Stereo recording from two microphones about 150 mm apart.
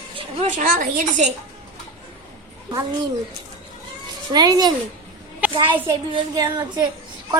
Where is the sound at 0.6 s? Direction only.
60° right (ahead or behind).